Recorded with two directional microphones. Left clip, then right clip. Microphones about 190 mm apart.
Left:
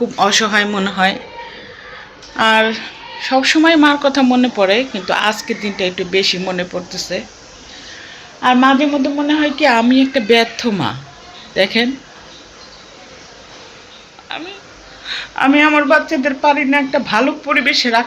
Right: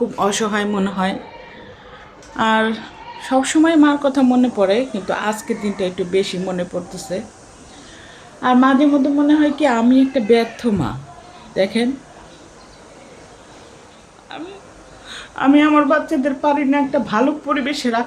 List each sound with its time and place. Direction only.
0.2 s speech: 15° right (ahead or behind)
2.3 s a woman's voice: 20° right (ahead or behind)
3.6 s speech: 10° right (ahead or behind)
8.4 s speech: 20° right (ahead or behind)
14.3 s speech: 10° right (ahead or behind)